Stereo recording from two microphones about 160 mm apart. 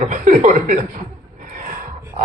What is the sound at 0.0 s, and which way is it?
Speech, 55° right (ahead or behind).